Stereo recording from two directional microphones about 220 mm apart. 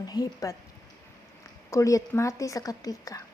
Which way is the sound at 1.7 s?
15° left (ahead or behind).